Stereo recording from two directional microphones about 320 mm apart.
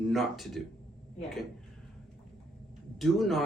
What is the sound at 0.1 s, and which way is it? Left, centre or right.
Speech, centre.